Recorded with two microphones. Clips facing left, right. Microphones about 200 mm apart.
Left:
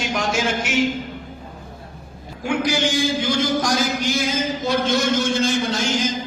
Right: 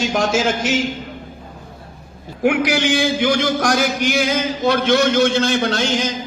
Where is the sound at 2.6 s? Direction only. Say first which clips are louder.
Right 3 dB; 70° right (ahead or behind).